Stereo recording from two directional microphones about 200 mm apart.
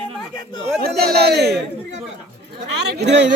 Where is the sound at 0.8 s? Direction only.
50° right (ahead or behind).